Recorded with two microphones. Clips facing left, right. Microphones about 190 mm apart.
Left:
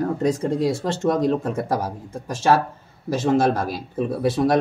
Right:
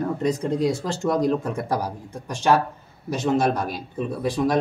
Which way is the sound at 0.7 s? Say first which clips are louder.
Left 2 dB; 25° left (ahead or behind).